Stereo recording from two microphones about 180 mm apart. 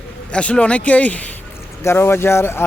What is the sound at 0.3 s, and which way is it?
Speech, 5° left (ahead or behind).